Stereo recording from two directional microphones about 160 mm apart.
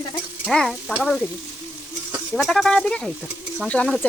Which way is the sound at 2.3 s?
Centre (ahead or behind).